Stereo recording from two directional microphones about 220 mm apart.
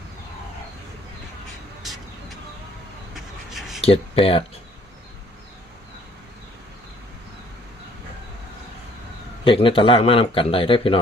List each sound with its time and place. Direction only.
3.8 s speech: 25° left (ahead or behind)
9.4 s speech: 25° left (ahead or behind)